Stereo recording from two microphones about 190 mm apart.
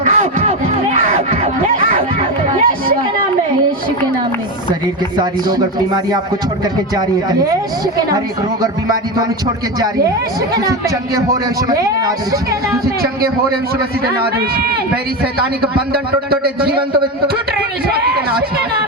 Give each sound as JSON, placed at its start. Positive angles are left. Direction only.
{"t": 0.0, "sound": "a sound", "side_deg": -40}
{"t": 5.1, "sound": "speech", "side_deg": -25}
{"t": 10.5, "sound": "speech", "side_deg": -15}
{"t": 12.8, "sound": "speech", "side_deg": -55}
{"t": 15.9, "sound": "a man's voice", "side_deg": -55}
{"t": 17.8, "sound": "a man's voice", "side_deg": -55}